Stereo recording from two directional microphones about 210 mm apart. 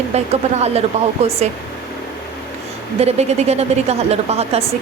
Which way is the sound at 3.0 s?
30° right (ahead or behind).